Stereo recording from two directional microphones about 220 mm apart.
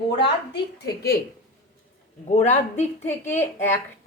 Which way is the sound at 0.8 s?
45° left (ahead or behind).